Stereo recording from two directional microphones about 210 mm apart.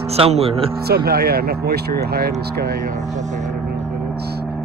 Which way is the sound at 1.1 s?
45° right (ahead or behind).